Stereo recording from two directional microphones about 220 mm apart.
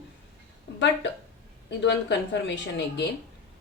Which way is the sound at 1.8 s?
55° left (ahead or behind).